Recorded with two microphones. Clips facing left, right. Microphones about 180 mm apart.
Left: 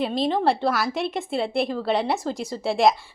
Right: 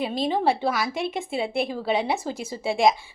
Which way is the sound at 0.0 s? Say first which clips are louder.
Left 1 dB; centre (ahead or behind).